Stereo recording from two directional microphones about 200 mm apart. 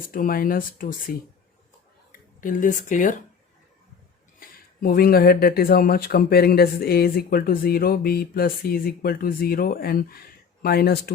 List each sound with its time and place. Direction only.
0.1 s speech: 45° left (ahead or behind)
2.4 s speech: 40° left (ahead or behind)
4.4 s speech: 45° left (ahead or behind)